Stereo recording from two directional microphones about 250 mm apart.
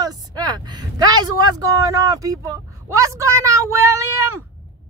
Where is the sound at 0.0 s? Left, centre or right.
Centre.